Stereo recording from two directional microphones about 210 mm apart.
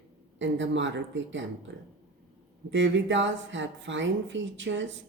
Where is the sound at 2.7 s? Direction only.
60° right (ahead or behind).